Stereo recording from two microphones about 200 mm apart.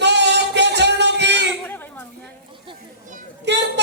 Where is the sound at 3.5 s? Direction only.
60° right (ahead or behind).